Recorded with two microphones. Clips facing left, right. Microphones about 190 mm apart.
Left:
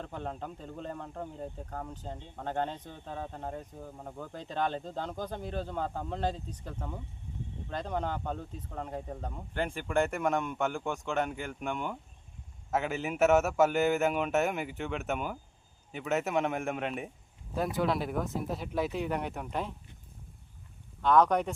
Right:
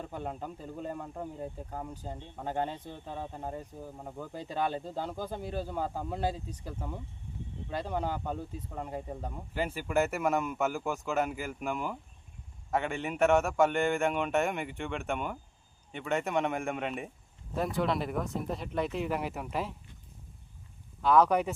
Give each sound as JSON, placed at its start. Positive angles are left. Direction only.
{"t": 0.0, "sound": "speech", "side_deg": -10}
{"t": 21.0, "sound": "speech", "side_deg": -5}